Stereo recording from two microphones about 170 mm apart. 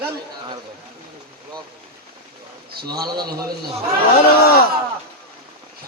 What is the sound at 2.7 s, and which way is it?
Speech, 65° right (ahead or behind).